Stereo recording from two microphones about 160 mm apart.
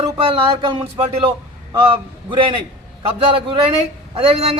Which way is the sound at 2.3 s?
30° right (ahead or behind).